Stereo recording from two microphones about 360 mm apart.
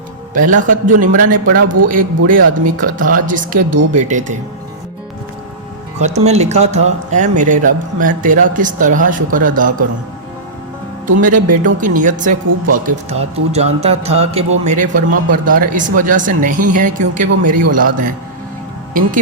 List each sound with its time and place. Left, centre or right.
0.3 s speech: right
6.0 s speech: centre
11.0 s speech: right